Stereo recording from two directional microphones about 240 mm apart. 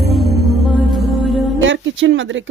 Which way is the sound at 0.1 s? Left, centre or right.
Centre.